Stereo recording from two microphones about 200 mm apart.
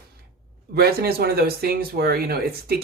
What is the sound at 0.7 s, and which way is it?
Speech, 50° right (ahead or behind).